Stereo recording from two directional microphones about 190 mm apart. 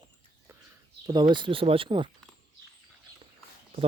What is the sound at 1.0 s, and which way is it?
Speech, 20° right (ahead or behind).